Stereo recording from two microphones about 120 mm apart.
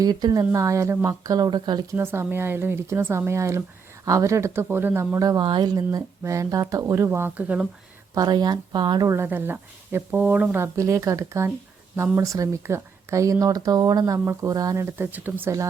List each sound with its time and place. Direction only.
0.0 s speech: 35° right (ahead or behind)
2.0 s speech: 20° right (ahead or behind)
5.4 s speech: 40° right (ahead or behind); by 7.7 s 10° right (ahead or behind)
8.1 s speech: 35° right (ahead or behind)
9.0 s speech: 20° right (ahead or behind)